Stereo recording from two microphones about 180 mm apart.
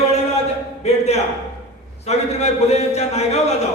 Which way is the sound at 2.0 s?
35° left (ahead or behind).